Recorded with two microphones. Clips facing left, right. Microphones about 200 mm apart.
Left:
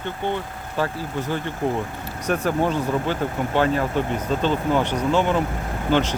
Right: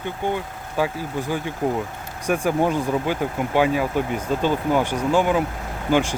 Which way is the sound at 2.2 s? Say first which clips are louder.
Right 1 dB; 10° right (ahead or behind).